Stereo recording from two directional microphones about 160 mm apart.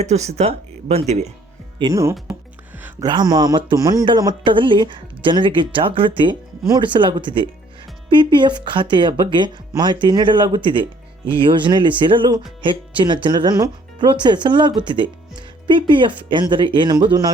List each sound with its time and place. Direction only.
0.0 s speech: 45° right (ahead or behind)
1.8 s speech: 20° right (ahead or behind)